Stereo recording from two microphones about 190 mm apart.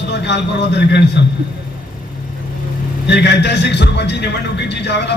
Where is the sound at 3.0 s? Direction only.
65° left (ahead or behind).